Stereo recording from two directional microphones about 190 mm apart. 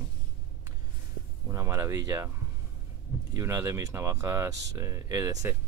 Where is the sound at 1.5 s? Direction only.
15° right (ahead or behind).